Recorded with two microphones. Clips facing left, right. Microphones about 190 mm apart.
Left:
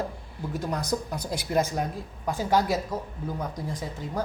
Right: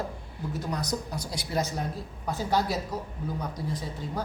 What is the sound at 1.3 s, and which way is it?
Speech, 55° left (ahead or behind).